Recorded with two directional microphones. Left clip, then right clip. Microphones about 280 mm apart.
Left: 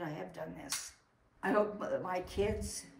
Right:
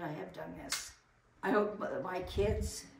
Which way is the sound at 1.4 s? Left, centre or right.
Centre.